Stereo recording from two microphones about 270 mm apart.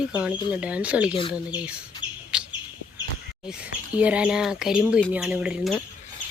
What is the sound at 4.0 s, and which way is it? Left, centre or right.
Speech, centre.